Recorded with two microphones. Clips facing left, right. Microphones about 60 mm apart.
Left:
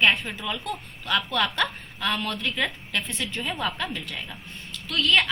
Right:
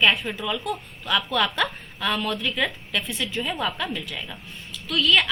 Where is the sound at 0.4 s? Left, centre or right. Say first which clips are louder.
Right 4 dB; centre.